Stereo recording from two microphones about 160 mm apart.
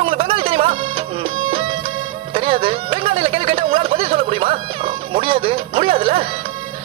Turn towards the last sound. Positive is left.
turn(degrees=-35)  # may be behind; listen again after turning